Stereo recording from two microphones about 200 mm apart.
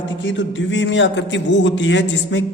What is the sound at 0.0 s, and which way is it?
A woman's voice, 65° left (ahead or behind).